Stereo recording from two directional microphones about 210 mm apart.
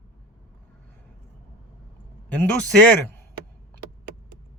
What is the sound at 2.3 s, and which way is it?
Speech, 5° left (ahead or behind).